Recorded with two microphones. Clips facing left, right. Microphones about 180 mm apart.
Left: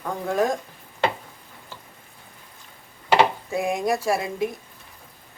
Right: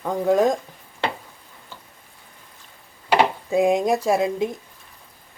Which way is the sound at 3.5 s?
20° right (ahead or behind).